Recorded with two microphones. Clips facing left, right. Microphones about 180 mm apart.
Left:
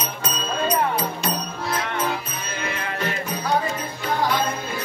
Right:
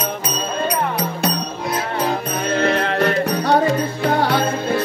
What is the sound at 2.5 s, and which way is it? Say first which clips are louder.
Music: right 12 dB; 70° right (ahead or behind).